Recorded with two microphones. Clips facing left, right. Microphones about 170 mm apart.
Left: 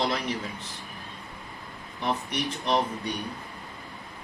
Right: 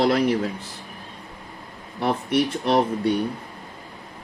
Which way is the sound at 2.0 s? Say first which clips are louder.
Right 8 dB; 60° right (ahead or behind).